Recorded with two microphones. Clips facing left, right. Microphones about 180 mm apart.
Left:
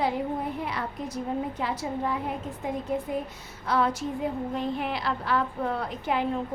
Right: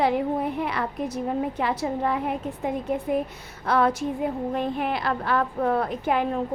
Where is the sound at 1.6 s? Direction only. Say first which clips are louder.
Right 4 dB; 65° right (ahead or behind).